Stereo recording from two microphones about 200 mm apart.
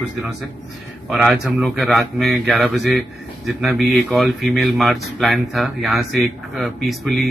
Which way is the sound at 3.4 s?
Centre (ahead or behind).